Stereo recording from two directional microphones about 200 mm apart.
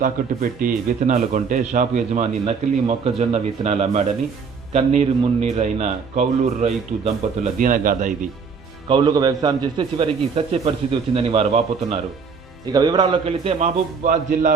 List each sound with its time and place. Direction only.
0.2 s a man's voice: 45° right (ahead or behind)
8.9 s a man's voice: 20° right (ahead or behind); by 14.5 s 40° right (ahead or behind)